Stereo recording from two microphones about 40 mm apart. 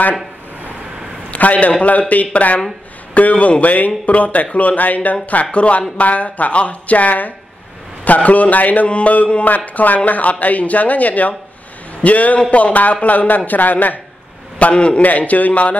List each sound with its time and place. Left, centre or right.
1.3 s a man's voice: left
8.8 s speech: left
14.6 s speech: left